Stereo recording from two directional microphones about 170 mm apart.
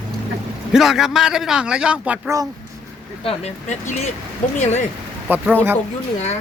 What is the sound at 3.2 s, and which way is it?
Speech, 35° left (ahead or behind).